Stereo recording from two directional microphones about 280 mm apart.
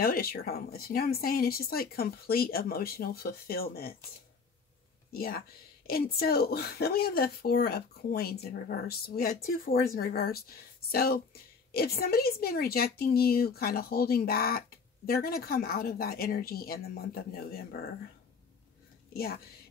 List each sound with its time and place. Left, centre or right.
0.0 s speech: left
5.1 s speech: left